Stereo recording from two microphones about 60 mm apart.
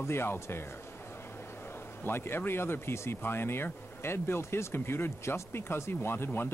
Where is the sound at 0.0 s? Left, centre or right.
Left.